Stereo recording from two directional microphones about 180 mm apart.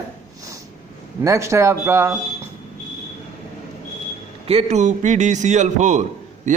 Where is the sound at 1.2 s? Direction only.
15° right (ahead or behind).